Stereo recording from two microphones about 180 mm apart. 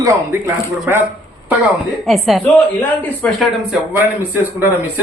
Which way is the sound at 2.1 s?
Centre (ahead or behind).